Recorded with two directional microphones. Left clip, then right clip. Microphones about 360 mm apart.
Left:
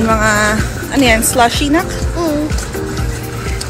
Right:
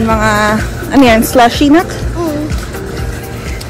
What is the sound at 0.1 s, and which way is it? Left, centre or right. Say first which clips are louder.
Speech: right 2 dB; centre.